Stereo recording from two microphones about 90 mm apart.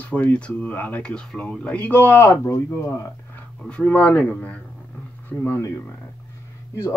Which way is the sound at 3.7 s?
10° left (ahead or behind).